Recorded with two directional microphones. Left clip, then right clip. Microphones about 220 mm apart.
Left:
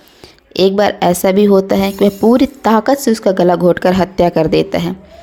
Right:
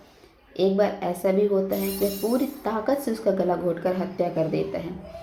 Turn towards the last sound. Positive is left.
turn(degrees=50)  # may be behind; listen again after turning